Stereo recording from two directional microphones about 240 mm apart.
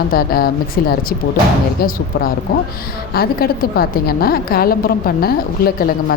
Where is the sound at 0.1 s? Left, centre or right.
Left.